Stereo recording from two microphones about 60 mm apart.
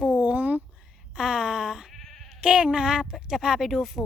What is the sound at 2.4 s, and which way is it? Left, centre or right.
Speech, centre.